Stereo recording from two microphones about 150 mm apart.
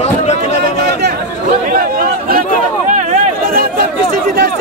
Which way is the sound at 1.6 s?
70° right (ahead or behind).